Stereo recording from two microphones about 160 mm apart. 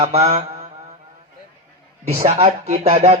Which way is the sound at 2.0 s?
40° right (ahead or behind).